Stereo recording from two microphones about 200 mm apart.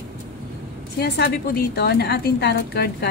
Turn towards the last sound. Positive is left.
turn(degrees=55)  # may be behind; listen again after turning